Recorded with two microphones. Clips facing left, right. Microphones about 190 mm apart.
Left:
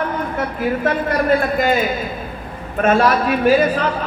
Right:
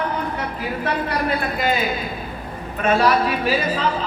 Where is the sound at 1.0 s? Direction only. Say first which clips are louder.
Left 6 dB; 45° left (ahead or behind).